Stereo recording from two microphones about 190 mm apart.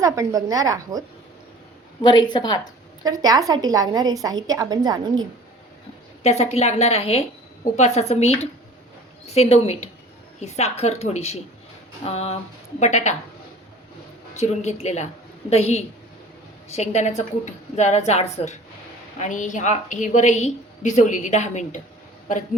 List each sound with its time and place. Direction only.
0.0 s a woman's voice: 15° right (ahead or behind)
2.0 s a woman's voice: 25° left (ahead or behind)
3.0 s a woman's voice: 20° right (ahead or behind)
6.2 s a woman's voice: 35° left (ahead or behind)
14.3 s a woman's voice: 35° left (ahead or behind)